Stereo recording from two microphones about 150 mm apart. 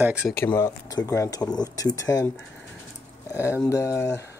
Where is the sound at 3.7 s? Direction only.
20° left (ahead or behind).